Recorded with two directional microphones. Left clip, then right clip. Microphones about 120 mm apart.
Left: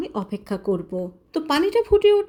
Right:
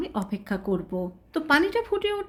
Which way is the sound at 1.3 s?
25° left (ahead or behind).